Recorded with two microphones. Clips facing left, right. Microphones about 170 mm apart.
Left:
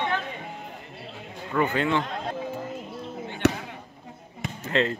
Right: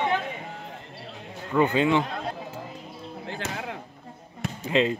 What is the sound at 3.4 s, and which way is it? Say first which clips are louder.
Basketball bounce: left 15 dB; 70° left (ahead or behind).